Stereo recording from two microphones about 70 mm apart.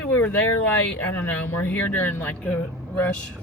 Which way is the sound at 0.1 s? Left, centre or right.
Left.